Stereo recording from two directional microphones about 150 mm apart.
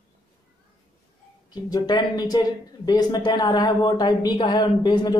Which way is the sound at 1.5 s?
25° left (ahead or behind).